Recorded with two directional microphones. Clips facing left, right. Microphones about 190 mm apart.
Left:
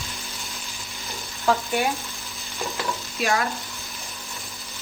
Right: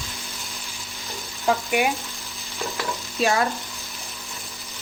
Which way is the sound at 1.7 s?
15° right (ahead or behind).